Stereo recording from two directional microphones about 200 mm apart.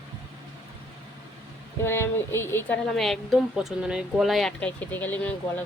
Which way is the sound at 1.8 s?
10° left (ahead or behind).